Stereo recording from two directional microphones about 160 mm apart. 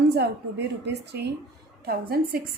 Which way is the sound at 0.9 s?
90° right.